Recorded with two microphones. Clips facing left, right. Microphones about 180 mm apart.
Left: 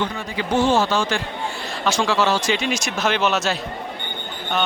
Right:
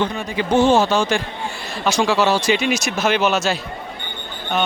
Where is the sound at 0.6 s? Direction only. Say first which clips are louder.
Right 3 dB; 20° right (ahead or behind); by 3.5 s 5° right (ahead or behind).